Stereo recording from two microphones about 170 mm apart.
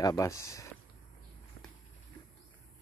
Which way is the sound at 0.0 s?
20° left (ahead or behind).